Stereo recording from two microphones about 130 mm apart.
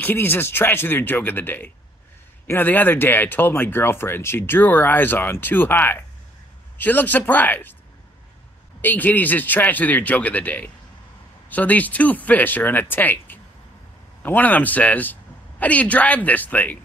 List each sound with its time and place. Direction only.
0.0 s speech: 15° left (ahead or behind)
8.8 s speech: 15° left (ahead or behind)